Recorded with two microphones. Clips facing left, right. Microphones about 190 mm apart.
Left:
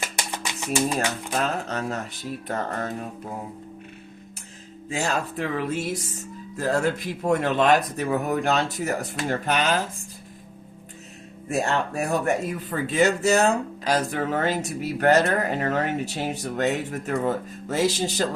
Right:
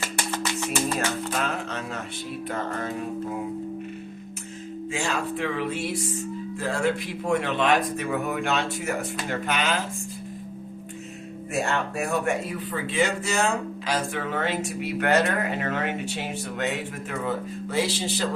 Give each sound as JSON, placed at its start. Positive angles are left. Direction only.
{"t": 0.0, "sound": "music", "side_deg": 15}
{"t": 1.5, "sound": "music", "side_deg": 40}
{"t": 4.9, "sound": "a man's voice", "side_deg": 40}
{"t": 11.5, "sound": "a man's voice", "side_deg": 40}